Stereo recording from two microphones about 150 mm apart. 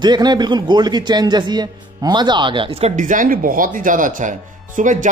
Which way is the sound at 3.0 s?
60° right (ahead or behind).